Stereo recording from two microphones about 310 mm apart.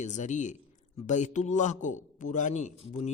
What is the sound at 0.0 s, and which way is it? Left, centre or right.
A man's voice, left.